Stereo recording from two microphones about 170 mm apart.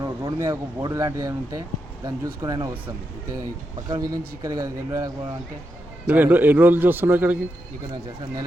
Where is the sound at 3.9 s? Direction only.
20° right (ahead or behind).